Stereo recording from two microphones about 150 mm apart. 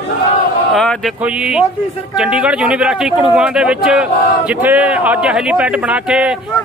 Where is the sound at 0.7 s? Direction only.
Centre (ahead or behind).